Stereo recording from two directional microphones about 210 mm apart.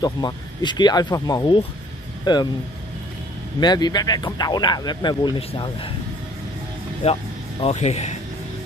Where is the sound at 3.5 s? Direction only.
20° left (ahead or behind).